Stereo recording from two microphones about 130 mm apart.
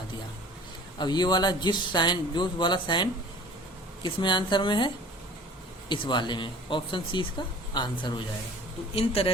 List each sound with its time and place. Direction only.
0.9 s speech: 35° left (ahead or behind)
5.9 s speech: 35° left (ahead or behind)
9.0 s speech: 50° left (ahead or behind)